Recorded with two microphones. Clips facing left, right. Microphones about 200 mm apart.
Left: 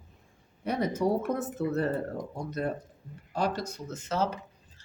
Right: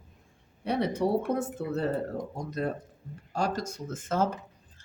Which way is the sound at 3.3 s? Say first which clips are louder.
Even; 45° right (ahead or behind).